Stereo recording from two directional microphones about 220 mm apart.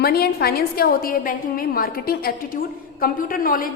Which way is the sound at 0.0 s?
45° left (ahead or behind).